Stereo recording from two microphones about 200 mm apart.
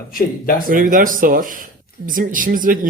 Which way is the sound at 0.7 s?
45° right (ahead or behind).